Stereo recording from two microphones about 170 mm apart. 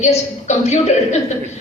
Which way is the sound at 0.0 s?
40° left (ahead or behind).